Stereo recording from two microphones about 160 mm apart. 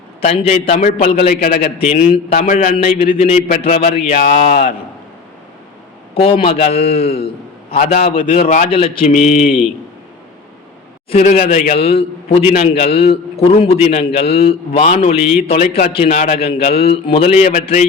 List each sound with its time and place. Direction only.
0.2 s a man's voice: 45° left (ahead or behind); by 2.9 s 60° left (ahead or behind)
3.0 s a man's voice: 40° left (ahead or behind)
6.1 s a man's voice: 35° left (ahead or behind)
8.4 s a man's voice: 50° left (ahead or behind)
8.7 s a man's voice: 35° left (ahead or behind)
9.0 s a man's voice: 50° left (ahead or behind)
11.1 s a man's voice: 45° left (ahead or behind)